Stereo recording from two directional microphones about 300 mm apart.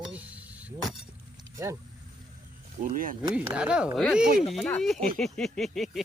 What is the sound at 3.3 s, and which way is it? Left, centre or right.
Speech, centre.